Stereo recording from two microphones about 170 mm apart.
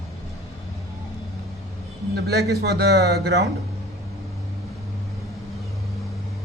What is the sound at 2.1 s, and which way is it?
A man's voice, 75° right (ahead or behind).